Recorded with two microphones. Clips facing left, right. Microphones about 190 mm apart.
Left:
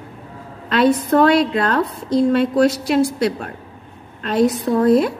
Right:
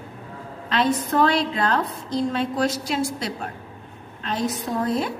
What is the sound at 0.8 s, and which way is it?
A woman's voice, 60° left (ahead or behind).